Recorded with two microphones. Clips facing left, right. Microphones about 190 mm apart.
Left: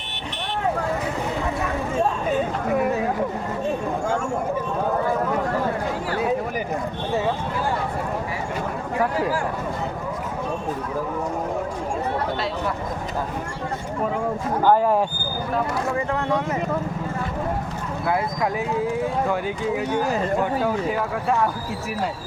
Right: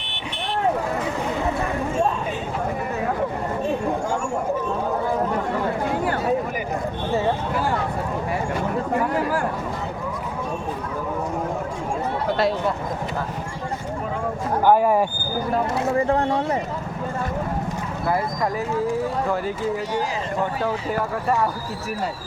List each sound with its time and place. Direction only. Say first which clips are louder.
14.6 s speech: right 1 dB; 10° right (ahead or behind)
16.0 s speech: right 5 dB; 30° right (ahead or behind)
19.3 s speech: even; centre (ahead or behind)